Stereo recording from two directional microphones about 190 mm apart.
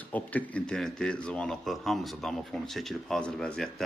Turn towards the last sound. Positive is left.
turn(degrees=5)  # may be behind; listen again after turning